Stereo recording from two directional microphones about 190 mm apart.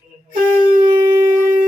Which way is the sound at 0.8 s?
20° right (ahead or behind).